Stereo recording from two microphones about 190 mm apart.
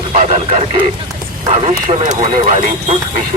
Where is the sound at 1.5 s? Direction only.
40° right (ahead or behind).